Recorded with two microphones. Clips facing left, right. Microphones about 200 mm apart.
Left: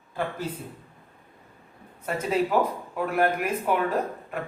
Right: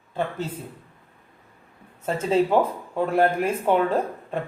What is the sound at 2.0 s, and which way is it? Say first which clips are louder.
Speech: right 4 dB; 25° right (ahead or behind).